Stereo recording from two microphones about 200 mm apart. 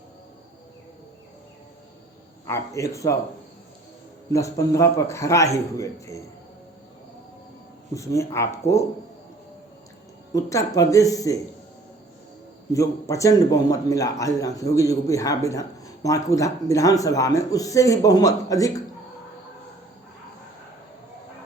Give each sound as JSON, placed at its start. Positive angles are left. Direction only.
{"t": 2.5, "sound": "a man's voice", "side_deg": 15}
{"t": 4.3, "sound": "a man's voice", "side_deg": 15}
{"t": 7.9, "sound": "a man's voice", "side_deg": 15}
{"t": 10.3, "sound": "a man's voice", "side_deg": 15}
{"t": 12.7, "sound": "a man's voice", "side_deg": 15}